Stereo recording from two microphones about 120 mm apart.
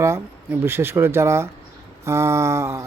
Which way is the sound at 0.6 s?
20° right (ahead or behind).